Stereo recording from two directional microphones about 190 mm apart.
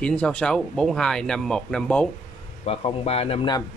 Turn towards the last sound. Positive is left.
turn(degrees=30)  # may be behind; listen again after turning